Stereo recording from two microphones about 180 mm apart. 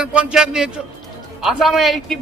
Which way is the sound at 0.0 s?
5° right (ahead or behind).